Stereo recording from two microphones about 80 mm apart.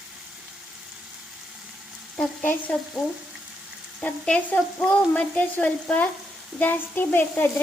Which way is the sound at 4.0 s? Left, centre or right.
Centre.